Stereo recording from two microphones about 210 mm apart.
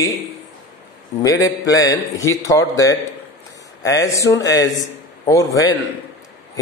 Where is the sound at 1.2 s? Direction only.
15° left (ahead or behind).